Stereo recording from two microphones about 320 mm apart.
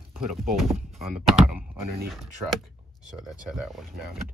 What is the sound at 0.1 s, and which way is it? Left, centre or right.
Speech, centre.